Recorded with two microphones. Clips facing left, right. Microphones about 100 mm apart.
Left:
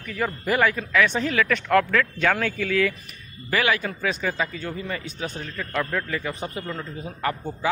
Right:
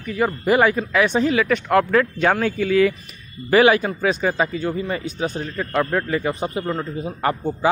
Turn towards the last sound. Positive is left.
turn(degrees=-30)  # may be behind; listen again after turning